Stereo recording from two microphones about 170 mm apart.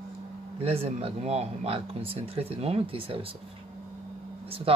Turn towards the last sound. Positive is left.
turn(degrees=-35)  # may be behind; listen again after turning